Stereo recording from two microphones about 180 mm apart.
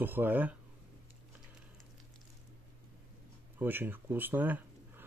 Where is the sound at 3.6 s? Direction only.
10° right (ahead or behind).